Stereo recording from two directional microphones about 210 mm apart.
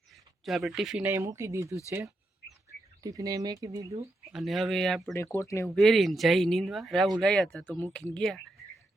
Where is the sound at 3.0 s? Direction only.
15° right (ahead or behind).